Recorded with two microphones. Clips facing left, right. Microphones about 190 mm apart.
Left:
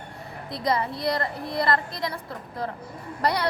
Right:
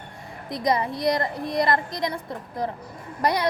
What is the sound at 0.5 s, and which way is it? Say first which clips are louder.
A woman's voice: right 2 dB; 15° right (ahead or behind).